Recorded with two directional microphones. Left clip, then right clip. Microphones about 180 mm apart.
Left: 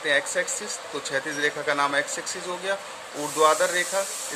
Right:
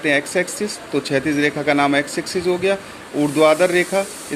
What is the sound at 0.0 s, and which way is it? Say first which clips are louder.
Speech: right 5 dB; 15° right (ahead or behind).